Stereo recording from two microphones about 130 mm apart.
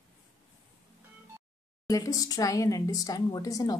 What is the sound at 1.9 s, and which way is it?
A woman's voice, 25° left (ahead or behind).